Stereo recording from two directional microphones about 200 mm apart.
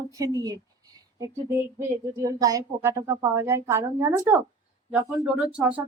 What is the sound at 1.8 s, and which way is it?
A woman's voice, 15° right (ahead or behind).